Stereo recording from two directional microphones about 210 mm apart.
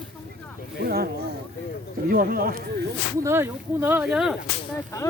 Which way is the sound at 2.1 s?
45° right (ahead or behind).